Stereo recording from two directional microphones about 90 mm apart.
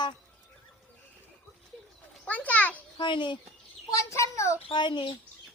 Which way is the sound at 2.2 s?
15° left (ahead or behind).